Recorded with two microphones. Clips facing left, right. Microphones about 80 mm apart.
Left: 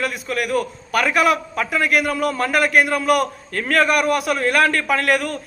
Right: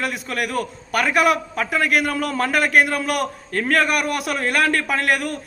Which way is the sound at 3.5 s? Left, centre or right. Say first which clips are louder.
Right 2 dB; right.